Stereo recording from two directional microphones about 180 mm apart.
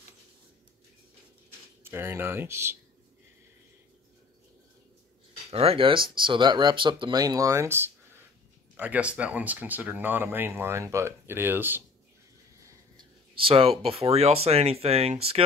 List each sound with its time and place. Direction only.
1.8 s speech: 10° right (ahead or behind)
5.5 s speech: 35° right (ahead or behind); by 11.8 s 10° right (ahead or behind)
12.6 s speech: 25° right (ahead or behind)